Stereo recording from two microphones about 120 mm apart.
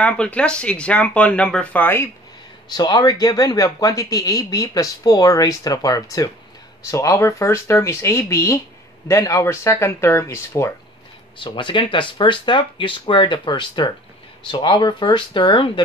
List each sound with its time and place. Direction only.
0.0 s speech: 10° left (ahead or behind)
2.7 s speech: 35° left (ahead or behind)
11.3 s speech: 45° left (ahead or behind)